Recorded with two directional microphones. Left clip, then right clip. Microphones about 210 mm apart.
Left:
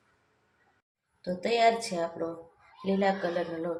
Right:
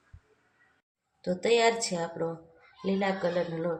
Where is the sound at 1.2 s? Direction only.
35° right (ahead or behind).